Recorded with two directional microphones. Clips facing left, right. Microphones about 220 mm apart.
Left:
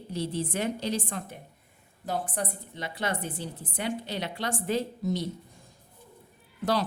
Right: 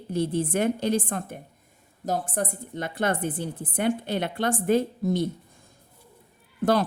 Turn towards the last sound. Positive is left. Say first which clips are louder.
# right 5 dB
turn(degrees=-55)  # may be behind; listen again after turning